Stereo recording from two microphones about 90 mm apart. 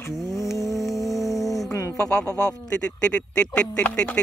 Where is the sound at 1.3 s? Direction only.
40° left (ahead or behind).